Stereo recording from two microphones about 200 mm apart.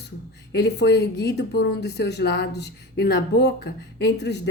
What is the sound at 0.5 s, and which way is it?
Speech, 55° left (ahead or behind).